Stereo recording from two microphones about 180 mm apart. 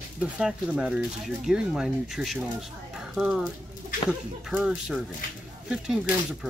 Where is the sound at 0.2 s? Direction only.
5° right (ahead or behind).